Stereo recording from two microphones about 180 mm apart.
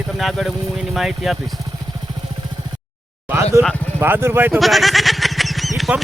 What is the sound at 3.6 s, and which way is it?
Speech, 15° right (ahead or behind).